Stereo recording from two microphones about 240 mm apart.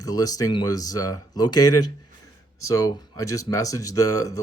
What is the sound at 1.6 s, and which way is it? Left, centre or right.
Speech, left.